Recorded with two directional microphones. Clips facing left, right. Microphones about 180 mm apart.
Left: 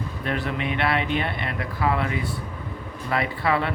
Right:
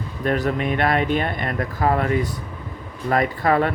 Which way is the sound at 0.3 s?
40° right (ahead or behind).